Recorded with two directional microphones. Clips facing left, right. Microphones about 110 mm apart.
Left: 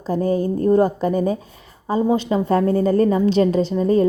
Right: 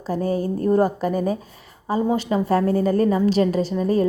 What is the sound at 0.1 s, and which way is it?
A woman's voice, 35° left (ahead or behind).